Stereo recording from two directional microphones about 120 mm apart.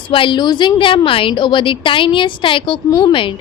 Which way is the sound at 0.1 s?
45° left (ahead or behind).